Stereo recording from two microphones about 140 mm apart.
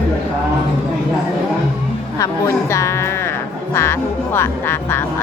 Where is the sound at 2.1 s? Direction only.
20° left (ahead or behind).